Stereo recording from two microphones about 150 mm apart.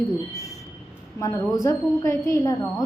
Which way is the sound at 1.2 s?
20° left (ahead or behind).